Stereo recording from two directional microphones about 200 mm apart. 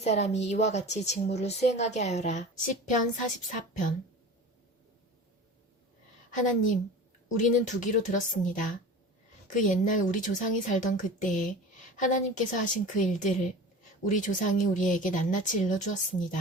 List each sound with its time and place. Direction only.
0.0 s speech: 35° left (ahead or behind)
6.3 s speech: 40° left (ahead or behind)